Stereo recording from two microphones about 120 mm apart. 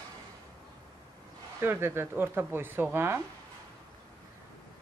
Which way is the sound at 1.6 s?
20° right (ahead or behind).